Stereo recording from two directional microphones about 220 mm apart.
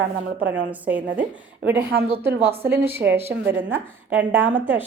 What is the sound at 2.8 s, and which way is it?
A woman's voice, 10° right (ahead or behind).